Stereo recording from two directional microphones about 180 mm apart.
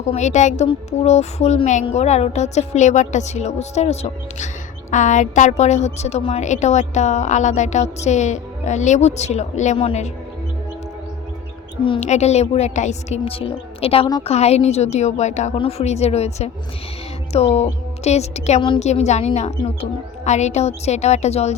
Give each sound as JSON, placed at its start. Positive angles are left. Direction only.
{"t": 0.0, "sound": "a woman's voice", "side_deg": 40}
{"t": 11.9, "sound": "a woman's voice", "side_deg": 40}